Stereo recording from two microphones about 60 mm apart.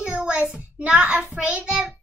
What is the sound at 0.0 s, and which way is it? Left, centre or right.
A child's voice, centre.